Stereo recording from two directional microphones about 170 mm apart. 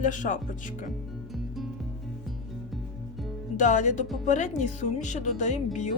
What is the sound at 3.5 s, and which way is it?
A woman's voice, 45° left (ahead or behind).